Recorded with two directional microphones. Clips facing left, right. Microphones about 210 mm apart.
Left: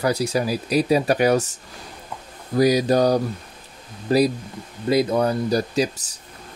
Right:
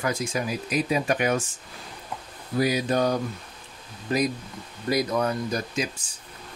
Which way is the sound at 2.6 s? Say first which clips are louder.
Left 6 dB; 40° left (ahead or behind).